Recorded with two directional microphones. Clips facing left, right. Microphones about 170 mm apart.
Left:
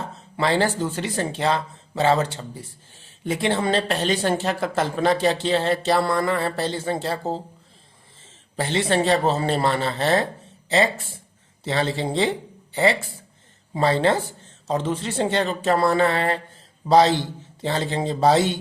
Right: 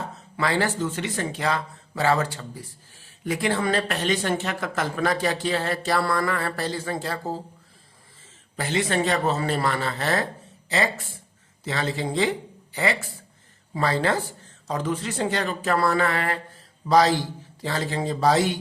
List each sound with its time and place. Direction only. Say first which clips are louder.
0.3 s speech: left 3 dB; 30° left (ahead or behind)